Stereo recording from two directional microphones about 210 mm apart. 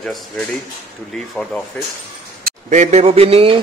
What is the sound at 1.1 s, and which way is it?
Speech, 5° left (ahead or behind).